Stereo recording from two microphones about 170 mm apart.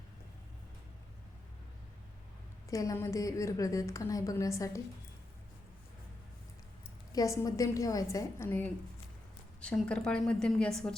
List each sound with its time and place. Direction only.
2.6 s a woman's voice: 20° left (ahead or behind)
7.1 s a woman's voice: 20° left (ahead or behind); by 10.9 s 5° left (ahead or behind)